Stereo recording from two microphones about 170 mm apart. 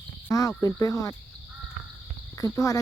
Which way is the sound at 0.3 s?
20° left (ahead or behind).